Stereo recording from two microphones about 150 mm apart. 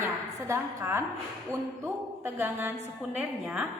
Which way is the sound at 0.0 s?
15° right (ahead or behind).